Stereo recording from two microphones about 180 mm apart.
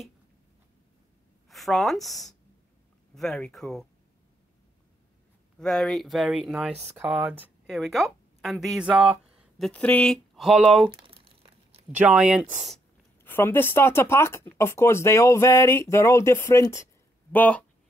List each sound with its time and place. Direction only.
1.5 s speech: centre (ahead or behind)
5.6 s speech: 5° left (ahead or behind)
6.7 s speech: 40° right (ahead or behind)
7.0 s a woman's voice: 10° right (ahead or behind)
10.9 s crumpling: 25° right (ahead or behind)
11.9 s speech: 10° right (ahead or behind)
13.2 s speech: 10° left (ahead or behind)